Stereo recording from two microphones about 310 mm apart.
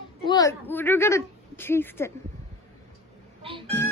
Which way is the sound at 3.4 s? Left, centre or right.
Centre.